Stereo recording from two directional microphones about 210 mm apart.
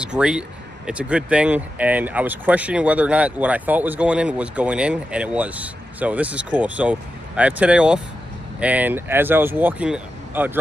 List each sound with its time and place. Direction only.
0.0 s speech: 5° right (ahead or behind)